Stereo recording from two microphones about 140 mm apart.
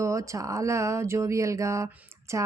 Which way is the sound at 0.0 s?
20° right (ahead or behind).